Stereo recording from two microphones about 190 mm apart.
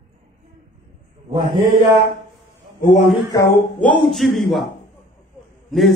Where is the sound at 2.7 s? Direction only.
45° left (ahead or behind).